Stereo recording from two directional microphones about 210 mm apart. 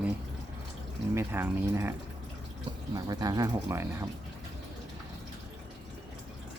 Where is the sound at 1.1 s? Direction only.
10° right (ahead or behind).